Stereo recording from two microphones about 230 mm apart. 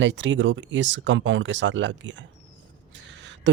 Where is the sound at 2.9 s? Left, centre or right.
Right.